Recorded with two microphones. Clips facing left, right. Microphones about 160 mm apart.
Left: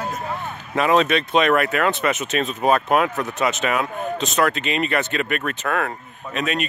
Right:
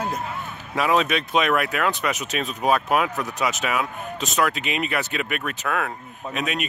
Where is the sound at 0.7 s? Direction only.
5° right (ahead or behind).